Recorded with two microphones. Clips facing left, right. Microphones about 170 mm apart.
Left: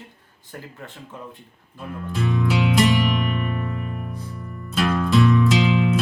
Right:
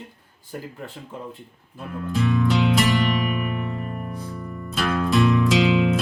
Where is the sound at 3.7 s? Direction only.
40° right (ahead or behind).